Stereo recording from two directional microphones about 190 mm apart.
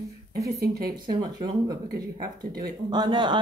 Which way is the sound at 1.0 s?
20° right (ahead or behind).